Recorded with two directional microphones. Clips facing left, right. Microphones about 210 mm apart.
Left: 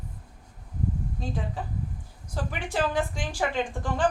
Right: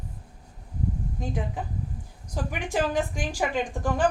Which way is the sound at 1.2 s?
15° right (ahead or behind).